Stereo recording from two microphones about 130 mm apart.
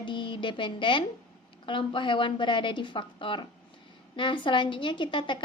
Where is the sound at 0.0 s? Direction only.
40° left (ahead or behind).